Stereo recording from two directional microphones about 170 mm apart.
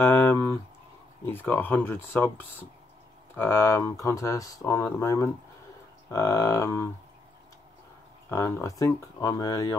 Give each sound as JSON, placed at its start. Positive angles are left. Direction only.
{"t": 0.0, "sound": "a sound", "side_deg": 15}
{"t": 1.2, "sound": "speech", "side_deg": 10}
{"t": 3.3, "sound": "speech", "side_deg": 15}
{"t": 8.3, "sound": "speech", "side_deg": 15}